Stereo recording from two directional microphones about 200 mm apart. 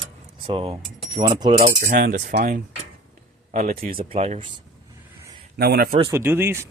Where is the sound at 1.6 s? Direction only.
45° right (ahead or behind).